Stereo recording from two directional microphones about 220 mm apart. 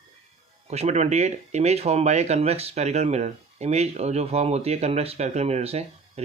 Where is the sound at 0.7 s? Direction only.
30° right (ahead or behind).